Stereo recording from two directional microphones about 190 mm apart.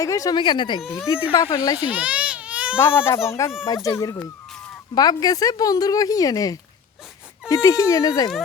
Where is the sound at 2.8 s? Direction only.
10° left (ahead or behind).